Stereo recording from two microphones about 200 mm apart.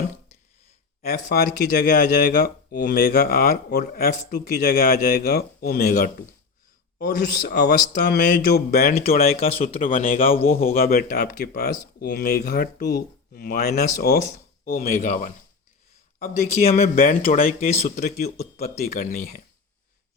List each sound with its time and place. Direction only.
1.0 s speech: 50° left (ahead or behind)
7.4 s speech: 55° left (ahead or behind)
9.5 s speech: 30° left (ahead or behind)
9.8 s speech: 45° left (ahead or behind)
16.9 s speech: 45° left (ahead or behind)